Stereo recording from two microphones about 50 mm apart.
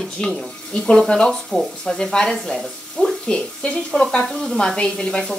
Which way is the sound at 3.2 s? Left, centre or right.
Left.